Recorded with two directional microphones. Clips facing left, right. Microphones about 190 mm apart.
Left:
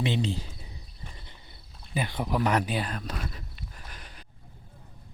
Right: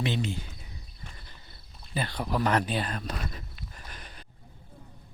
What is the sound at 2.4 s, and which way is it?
Speech, 5° left (ahead or behind).